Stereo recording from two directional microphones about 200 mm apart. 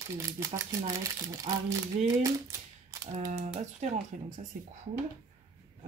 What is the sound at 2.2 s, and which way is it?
Typewriter, 15° right (ahead or behind).